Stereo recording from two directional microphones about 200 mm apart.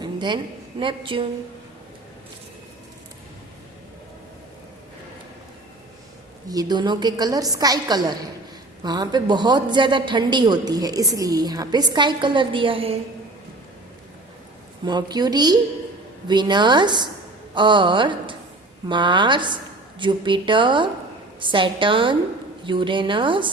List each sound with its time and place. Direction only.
0.0 s a sound: 20° right (ahead or behind)
0.8 s a man's voice: 25° right (ahead or behind)
6.5 s a man's voice: 20° right (ahead or behind)
14.8 s a man's voice: 20° right (ahead or behind)